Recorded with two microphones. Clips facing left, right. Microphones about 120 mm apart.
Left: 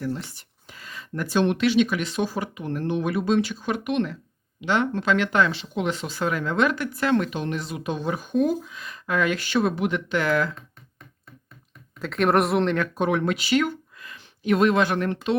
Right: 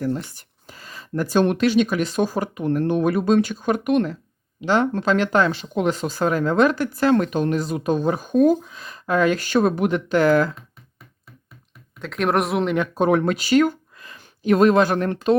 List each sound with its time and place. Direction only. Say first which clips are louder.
0.0 s speech: right 5 dB; 50° right (ahead or behind)
11.9 s speech: even; centre (ahead or behind)
12.9 s speech: right 5 dB; 40° right (ahead or behind)